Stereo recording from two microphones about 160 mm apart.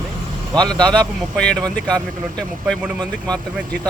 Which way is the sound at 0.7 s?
5° left (ahead or behind).